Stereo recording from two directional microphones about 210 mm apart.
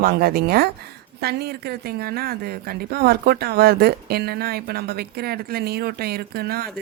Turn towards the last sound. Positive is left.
turn(degrees=-50)  # may be behind; listen again after turning